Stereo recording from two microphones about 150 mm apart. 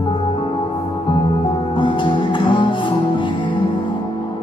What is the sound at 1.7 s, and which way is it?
Music, 35° left (ahead or behind).